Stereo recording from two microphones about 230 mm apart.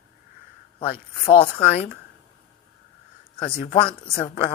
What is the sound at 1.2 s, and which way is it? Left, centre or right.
Speech, left.